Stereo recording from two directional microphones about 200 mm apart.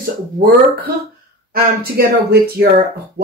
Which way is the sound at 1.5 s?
50° right (ahead or behind).